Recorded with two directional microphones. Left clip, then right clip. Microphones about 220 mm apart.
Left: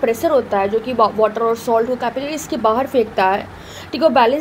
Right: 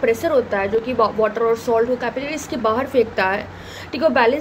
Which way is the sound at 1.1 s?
30° left (ahead or behind).